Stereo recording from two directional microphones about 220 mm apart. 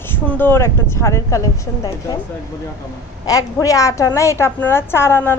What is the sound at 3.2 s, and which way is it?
A woman's voice, 15° left (ahead or behind).